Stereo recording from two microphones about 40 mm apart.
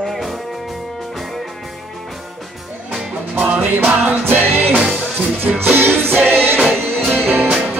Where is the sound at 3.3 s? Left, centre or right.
Right.